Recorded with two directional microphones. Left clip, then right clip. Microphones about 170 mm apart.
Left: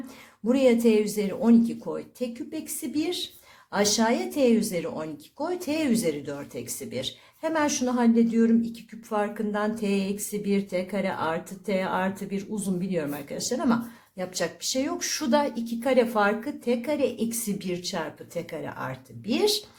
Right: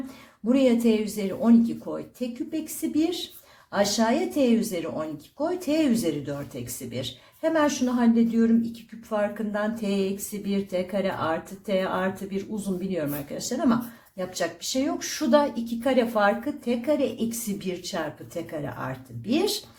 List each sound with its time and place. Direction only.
0.4 s speech: 35° left (ahead or behind)